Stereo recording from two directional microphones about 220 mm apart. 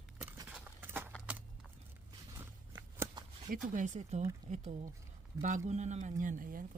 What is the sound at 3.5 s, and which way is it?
Speech, 35° right (ahead or behind).